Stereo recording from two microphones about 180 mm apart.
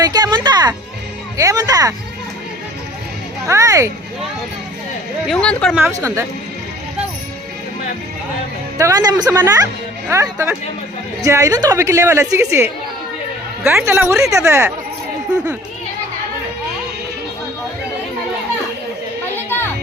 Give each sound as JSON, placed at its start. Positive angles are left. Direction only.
{"t": 0.0, "sound": "music", "side_deg": -20}
{"t": 1.4, "sound": "a woman's voice", "side_deg": -20}
{"t": 3.4, "sound": "a woman's voice", "side_deg": -15}
{"t": 5.2, "sound": "speech", "side_deg": 5}
{"t": 5.7, "sound": "a woman's voice", "side_deg": -15}
{"t": 8.8, "sound": "a woman's voice", "side_deg": -20}
{"t": 13.8, "sound": "a woman's voice", "side_deg": -10}